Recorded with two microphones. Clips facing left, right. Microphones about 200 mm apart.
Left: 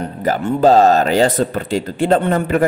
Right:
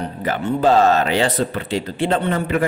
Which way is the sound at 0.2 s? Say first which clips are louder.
Left 4 dB; 40° left (ahead or behind).